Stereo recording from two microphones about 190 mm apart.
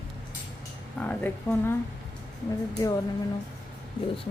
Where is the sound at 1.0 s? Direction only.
10° left (ahead or behind).